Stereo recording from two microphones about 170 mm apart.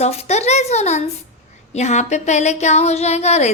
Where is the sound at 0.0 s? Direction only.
40° left (ahead or behind).